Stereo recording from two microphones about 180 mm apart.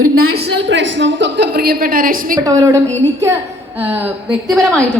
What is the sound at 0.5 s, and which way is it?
A woman's voice, 85° right.